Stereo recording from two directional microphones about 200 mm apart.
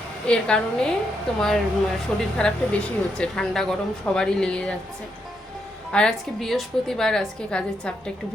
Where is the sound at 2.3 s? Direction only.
5° left (ahead or behind).